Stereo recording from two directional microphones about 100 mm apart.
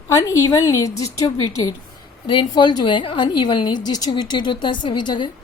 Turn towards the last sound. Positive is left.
turn(degrees=50)  # may be behind; listen again after turning